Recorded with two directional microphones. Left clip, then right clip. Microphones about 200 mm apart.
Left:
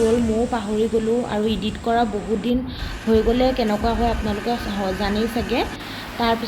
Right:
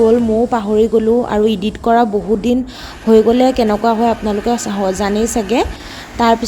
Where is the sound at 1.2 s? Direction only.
55° right (ahead or behind).